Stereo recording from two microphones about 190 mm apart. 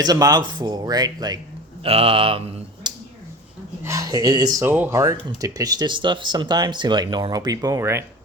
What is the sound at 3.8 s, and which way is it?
Speech, 15° right (ahead or behind).